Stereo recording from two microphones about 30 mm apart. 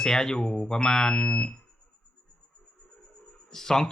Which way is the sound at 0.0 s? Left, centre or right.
Left.